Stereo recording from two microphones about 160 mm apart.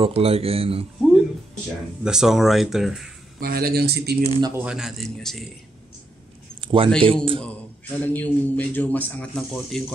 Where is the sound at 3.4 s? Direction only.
70° right (ahead or behind).